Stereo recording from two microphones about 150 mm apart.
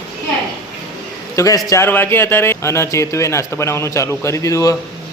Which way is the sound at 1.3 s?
20° left (ahead or behind).